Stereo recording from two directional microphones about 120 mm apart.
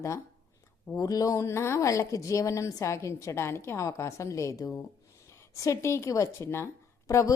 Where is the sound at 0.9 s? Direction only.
30° left (ahead or behind).